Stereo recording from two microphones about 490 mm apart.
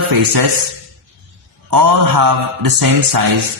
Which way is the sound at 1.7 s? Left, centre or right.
Right.